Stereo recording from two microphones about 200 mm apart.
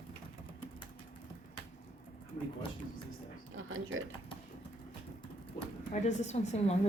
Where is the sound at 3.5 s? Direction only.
85° right.